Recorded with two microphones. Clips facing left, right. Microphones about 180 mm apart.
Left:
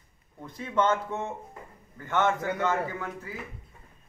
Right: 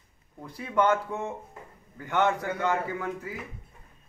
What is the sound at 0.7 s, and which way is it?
Speech, 20° left (ahead or behind).